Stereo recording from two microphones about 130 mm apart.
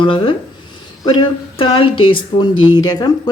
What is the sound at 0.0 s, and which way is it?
Speech, 40° left (ahead or behind).